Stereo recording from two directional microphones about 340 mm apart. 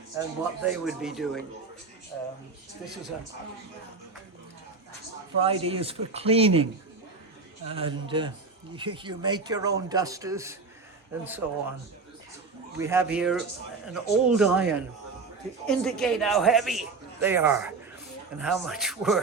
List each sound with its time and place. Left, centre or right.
0.2 s a man's voice: centre
5.4 s a man's voice: centre
12.8 s a man's voice: centre